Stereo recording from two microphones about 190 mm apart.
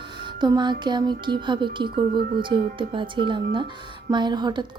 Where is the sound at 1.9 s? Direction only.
55° right (ahead or behind).